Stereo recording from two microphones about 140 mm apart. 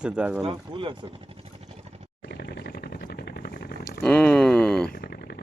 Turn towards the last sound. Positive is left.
turn(degrees=10)  # may be behind; listen again after turning